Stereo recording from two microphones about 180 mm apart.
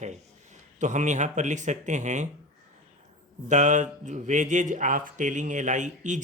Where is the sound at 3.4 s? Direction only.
40° right (ahead or behind).